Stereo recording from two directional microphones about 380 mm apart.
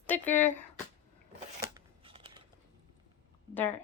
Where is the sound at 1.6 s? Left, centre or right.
Centre.